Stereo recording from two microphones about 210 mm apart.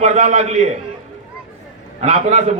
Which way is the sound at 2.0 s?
30° right (ahead or behind).